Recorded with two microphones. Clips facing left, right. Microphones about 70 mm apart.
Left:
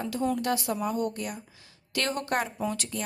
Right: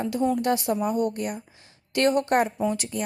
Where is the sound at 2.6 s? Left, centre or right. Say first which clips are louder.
Right 5 dB; centre.